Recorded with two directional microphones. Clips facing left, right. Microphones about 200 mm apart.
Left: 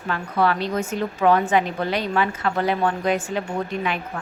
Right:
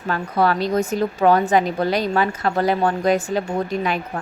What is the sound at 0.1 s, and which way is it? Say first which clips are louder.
A woman's voice: right 2 dB; 40° right (ahead or behind).